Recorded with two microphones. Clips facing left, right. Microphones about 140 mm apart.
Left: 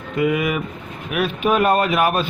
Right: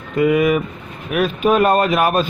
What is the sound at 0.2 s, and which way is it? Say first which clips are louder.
Speech: right 5 dB; 45° right (ahead or behind).